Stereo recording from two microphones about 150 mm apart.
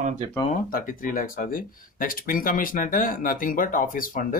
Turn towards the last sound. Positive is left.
turn(degrees=65)  # may be behind; listen again after turning